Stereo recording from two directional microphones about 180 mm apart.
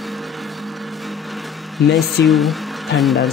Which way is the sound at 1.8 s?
Centre (ahead or behind).